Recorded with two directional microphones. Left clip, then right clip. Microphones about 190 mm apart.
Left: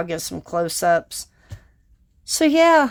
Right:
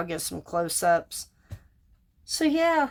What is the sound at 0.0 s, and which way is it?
A woman's voice, 30° left (ahead or behind).